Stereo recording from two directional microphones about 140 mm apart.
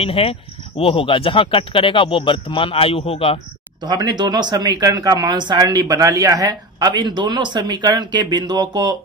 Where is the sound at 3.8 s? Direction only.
30° right (ahead or behind).